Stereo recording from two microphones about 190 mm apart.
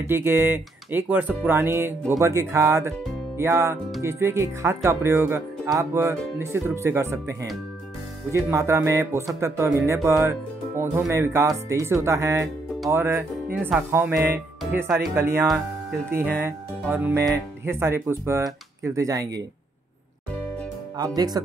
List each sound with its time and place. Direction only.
0.0 s speech: 10° right (ahead or behind)
21.0 s speech: 20° right (ahead or behind)